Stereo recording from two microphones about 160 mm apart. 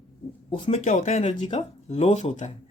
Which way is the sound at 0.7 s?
45° left (ahead or behind).